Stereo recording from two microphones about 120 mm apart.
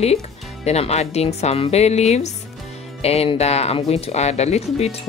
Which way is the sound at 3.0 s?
60° left (ahead or behind).